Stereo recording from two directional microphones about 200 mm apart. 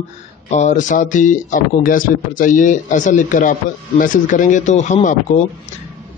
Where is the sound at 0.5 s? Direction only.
35° left (ahead or behind).